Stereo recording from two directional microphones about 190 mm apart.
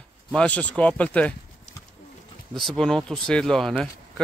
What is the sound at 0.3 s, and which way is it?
Speech, 5° left (ahead or behind).